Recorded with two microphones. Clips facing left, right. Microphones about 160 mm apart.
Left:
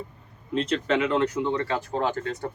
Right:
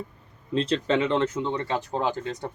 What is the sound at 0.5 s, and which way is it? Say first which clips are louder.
A man's voice: right 1 dB; 30° right (ahead or behind).